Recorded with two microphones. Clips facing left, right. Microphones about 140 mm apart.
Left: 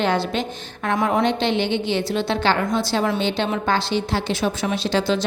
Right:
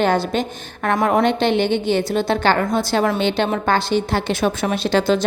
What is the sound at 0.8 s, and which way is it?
A woman's voice, 65° right (ahead or behind).